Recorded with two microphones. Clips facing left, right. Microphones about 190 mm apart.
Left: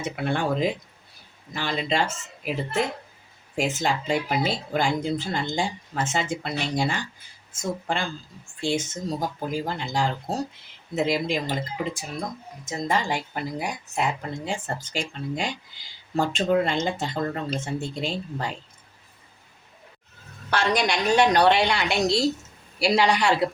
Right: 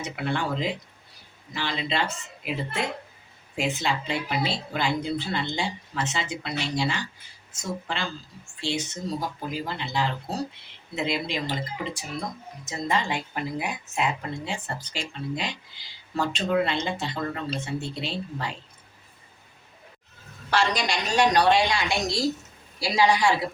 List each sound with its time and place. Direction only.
0.0 s speech: 50° left (ahead or behind)
12.6 s speech: 45° left (ahead or behind)
20.5 s a woman's voice: 55° left (ahead or behind)